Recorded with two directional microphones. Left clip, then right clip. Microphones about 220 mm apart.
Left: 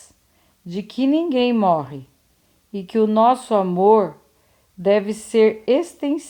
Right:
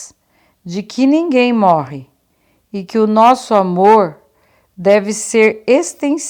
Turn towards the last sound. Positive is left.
turn(degrees=-25)  # may be behind; listen again after turning